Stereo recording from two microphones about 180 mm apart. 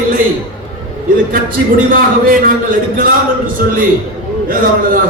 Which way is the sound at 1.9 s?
55° right (ahead or behind).